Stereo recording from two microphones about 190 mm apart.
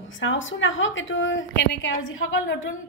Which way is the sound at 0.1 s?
85° left.